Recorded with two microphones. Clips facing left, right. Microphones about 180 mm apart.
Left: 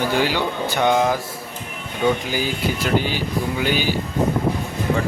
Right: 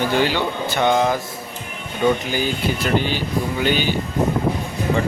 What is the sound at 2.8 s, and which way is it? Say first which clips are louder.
Speech: even; 10° left (ahead or behind).